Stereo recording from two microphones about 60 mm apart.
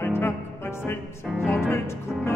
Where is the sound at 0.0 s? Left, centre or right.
Left.